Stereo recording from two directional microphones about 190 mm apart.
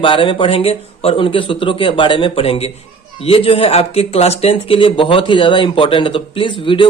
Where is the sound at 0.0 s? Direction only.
25° left (ahead or behind).